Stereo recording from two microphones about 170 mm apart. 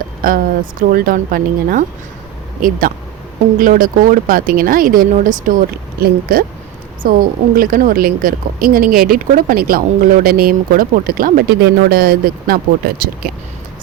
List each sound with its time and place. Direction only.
0.8 s a woman's voice: 55° right (ahead or behind)